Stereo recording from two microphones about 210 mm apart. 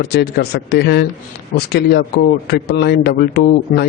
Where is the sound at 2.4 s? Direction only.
50° left (ahead or behind).